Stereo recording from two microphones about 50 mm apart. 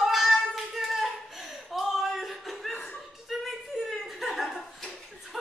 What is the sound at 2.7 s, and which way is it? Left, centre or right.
Chuckle, left.